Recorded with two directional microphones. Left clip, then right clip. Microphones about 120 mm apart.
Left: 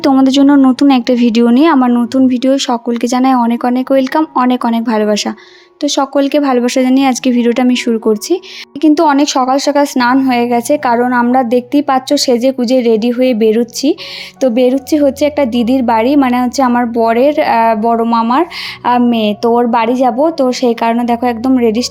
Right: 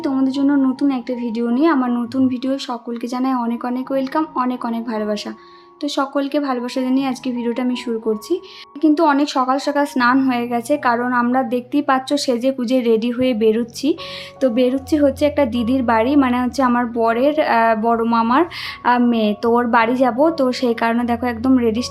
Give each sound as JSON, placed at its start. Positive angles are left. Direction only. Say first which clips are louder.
{"t": 0.1, "sound": "speech", "louder": "left 10 dB", "side_deg": 90}
{"t": 5.8, "sound": "speech", "louder": "left 8 dB", "side_deg": 60}
{"t": 9.0, "sound": "a woman's voice", "louder": "left 6 dB", "side_deg": 50}